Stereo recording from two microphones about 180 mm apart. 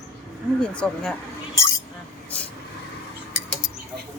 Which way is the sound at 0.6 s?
5° left (ahead or behind).